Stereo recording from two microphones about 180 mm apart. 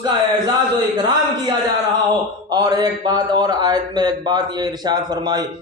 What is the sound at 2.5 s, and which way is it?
A man's voice, 20° right (ahead or behind).